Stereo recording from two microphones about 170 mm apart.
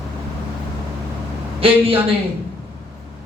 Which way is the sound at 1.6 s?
35° right (ahead or behind).